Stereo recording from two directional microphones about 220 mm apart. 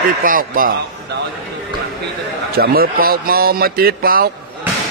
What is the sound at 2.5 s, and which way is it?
A man's voice, 45° right (ahead or behind).